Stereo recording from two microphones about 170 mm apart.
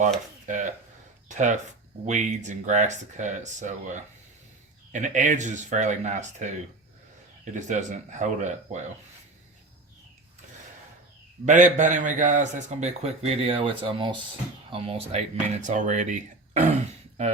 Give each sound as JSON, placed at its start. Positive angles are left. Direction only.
{"t": 0.4, "sound": "a man's voice", "side_deg": -50}
{"t": 7.5, "sound": "a man's voice", "side_deg": -45}
{"t": 11.4, "sound": "a man's voice", "side_deg": -45}